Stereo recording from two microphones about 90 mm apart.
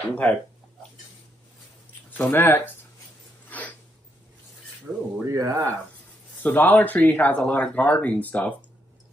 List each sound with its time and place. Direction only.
0.1 s speech: 15° left (ahead or behind)
2.1 s speech: 20° left (ahead or behind)
3.4 s a sound: 15° left (ahead or behind)
4.9 s speech: 10° right (ahead or behind)
5.2 s speech: 35° right (ahead or behind)
6.4 s speech: 20° left (ahead or behind)